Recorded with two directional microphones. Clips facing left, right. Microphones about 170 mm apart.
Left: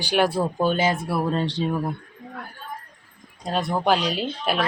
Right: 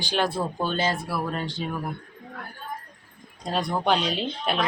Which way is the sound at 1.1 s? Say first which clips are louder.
Left 5 dB; 25° left (ahead or behind).